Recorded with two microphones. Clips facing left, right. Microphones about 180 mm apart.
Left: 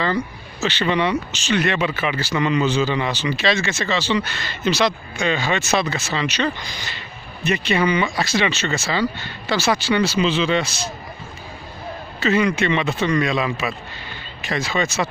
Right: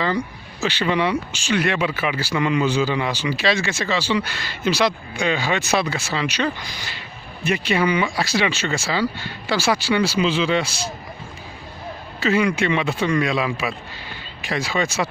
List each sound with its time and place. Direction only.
0.0 s speech: 10° right (ahead or behind)
12.2 s speech: 10° right (ahead or behind)